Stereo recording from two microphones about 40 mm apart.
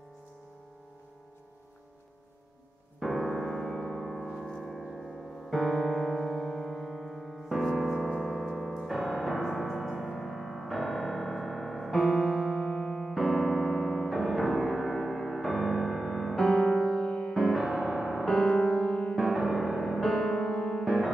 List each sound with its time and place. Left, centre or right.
3.0 s piano: centre
5.5 s music: centre
7.8 s a sound: centre
8.2 s piano: centre; by 13.1 s left
13.1 s piano: centre
17.3 s music: centre
18.4 s music: left
19.1 s music: centre
20.8 s music: centre